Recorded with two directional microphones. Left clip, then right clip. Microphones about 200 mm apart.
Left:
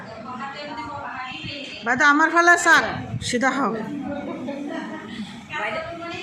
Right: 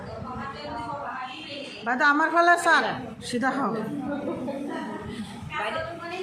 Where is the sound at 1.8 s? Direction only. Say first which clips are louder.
Left 5 dB; 15° left (ahead or behind).